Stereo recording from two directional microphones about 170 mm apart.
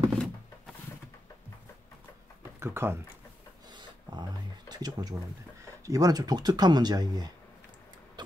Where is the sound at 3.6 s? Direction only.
25° right (ahead or behind).